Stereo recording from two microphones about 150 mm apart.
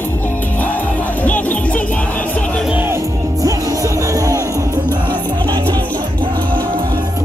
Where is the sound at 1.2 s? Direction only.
10° left (ahead or behind).